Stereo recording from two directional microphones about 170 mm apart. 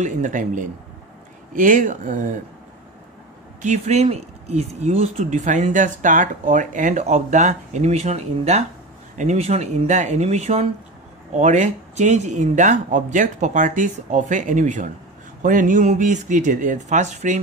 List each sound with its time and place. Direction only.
0.0 s speech: 45° right (ahead or behind)
3.6 s speech: 40° right (ahead or behind)